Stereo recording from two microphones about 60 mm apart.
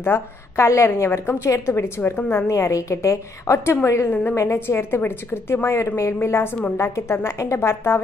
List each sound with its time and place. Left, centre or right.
0.0 s a woman's voice: left
2.1 s a woman's voice: left
2.4 s a woman's voice: left
4.1 s a woman's voice: left
4.4 s a woman's voice: left
6.2 s a woman's voice: left